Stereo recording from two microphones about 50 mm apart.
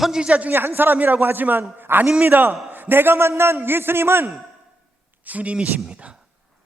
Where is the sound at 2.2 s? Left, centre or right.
Right.